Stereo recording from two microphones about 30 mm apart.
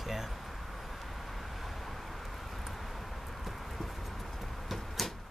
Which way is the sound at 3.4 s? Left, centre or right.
Centre.